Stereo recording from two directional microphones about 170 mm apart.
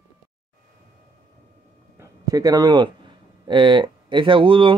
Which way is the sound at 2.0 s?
20° right (ahead or behind).